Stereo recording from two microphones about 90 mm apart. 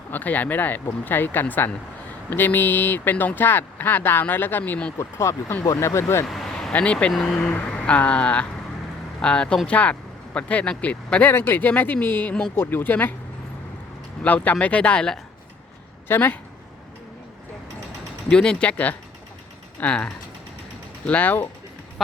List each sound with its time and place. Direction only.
0.1 s speech: 20° left (ahead or behind)
4.9 s speech: 30° left (ahead or behind)
6.2 s speech: centre (ahead or behind); by 13.1 s 20° left (ahead or behind)
14.3 s speech: 15° left (ahead or behind)
16.0 s speech: 25° left (ahead or behind)
18.3 s speech: 10° left (ahead or behind)